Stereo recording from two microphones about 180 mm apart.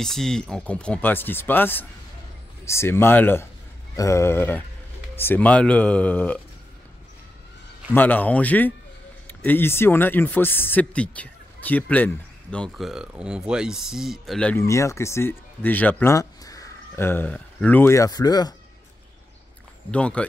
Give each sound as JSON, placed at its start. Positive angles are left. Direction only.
{"t": 0.0, "sound": "speech", "side_deg": 0}
{"t": 7.9, "sound": "speech", "side_deg": 10}
{"t": 14.6, "sound": "speech", "side_deg": 15}
{"t": 19.9, "sound": "speech", "side_deg": 5}